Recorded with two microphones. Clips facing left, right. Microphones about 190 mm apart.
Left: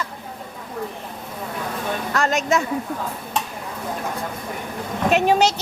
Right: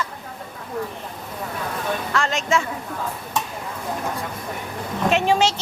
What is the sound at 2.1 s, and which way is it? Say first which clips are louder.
Speech: left 3 dB; 40° left (ahead or behind).